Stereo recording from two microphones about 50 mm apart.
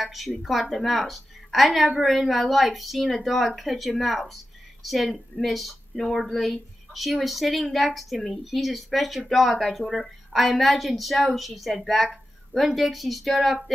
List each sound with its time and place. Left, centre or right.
0.0 s a woman's voice: centre